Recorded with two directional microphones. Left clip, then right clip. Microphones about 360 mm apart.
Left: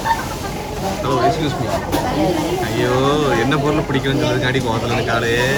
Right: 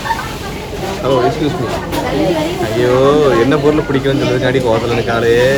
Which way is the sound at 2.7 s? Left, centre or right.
Centre.